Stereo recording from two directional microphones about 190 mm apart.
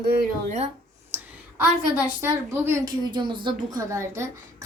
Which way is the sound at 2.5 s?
15° right (ahead or behind).